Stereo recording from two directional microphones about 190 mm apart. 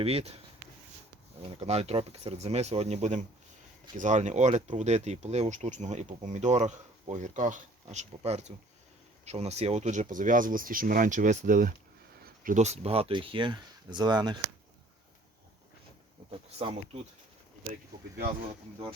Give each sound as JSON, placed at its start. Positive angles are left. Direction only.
{"t": 0.0, "sound": "speech", "side_deg": -30}
{"t": 1.4, "sound": "speech", "side_deg": -35}
{"t": 16.6, "sound": "speech", "side_deg": -30}